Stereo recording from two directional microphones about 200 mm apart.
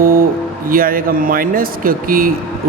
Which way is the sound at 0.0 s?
45° right (ahead or behind).